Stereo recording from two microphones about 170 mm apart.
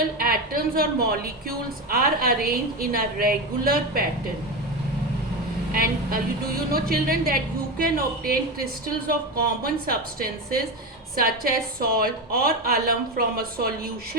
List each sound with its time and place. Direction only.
0.2 s a woman's voice: 60° right (ahead or behind)
5.7 s a woman's voice: 60° right (ahead or behind)
9.8 s a woman's voice: 60° right (ahead or behind)